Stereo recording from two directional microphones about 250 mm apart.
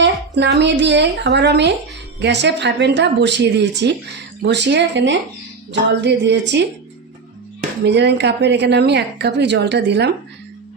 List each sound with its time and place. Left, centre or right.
0.0 s a woman's voice: right
7.9 s a woman's voice: right